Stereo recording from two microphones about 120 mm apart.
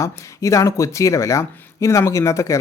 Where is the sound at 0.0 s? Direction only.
25° left (ahead or behind).